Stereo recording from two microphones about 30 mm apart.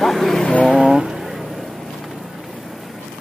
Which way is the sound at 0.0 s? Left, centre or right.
Centre.